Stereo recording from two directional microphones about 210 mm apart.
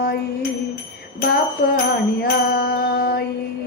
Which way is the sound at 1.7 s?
45° left (ahead or behind).